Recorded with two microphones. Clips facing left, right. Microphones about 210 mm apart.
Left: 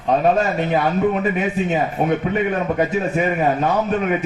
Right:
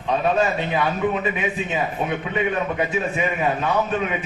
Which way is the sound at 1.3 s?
45° left (ahead or behind).